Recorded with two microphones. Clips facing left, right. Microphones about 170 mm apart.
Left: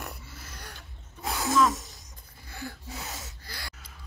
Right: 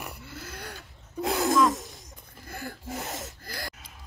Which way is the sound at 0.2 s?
60° right (ahead or behind).